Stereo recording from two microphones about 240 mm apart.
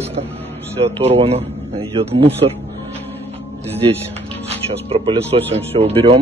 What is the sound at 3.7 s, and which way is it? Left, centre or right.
Music, right.